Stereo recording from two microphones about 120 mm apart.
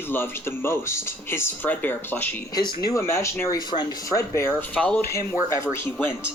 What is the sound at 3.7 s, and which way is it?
Speech, 35° left (ahead or behind).